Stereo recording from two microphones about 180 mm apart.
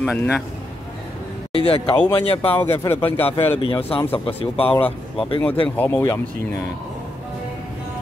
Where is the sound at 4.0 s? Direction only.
10° left (ahead or behind).